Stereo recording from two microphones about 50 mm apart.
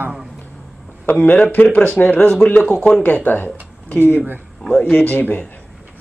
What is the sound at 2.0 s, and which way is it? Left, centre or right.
Speech, left.